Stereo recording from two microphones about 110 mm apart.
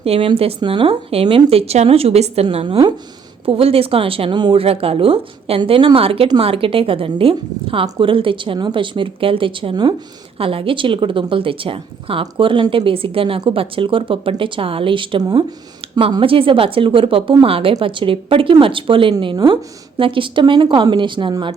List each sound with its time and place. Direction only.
0.0 s a woman's voice: 55° right (ahead or behind)
4.6 s a woman's voice: 60° right (ahead or behind); by 9.9 s 45° right (ahead or behind)
10.3 s a woman's voice: 55° right (ahead or behind)
16.2 s a woman's voice: 55° right (ahead or behind)